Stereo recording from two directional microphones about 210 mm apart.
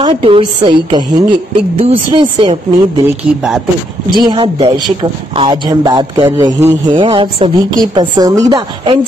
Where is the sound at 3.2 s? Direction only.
5° right (ahead or behind).